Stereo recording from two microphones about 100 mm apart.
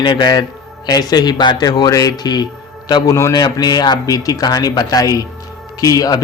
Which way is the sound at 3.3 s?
45° left (ahead or behind).